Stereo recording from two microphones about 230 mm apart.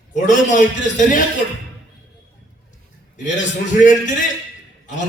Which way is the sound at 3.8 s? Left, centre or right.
Left.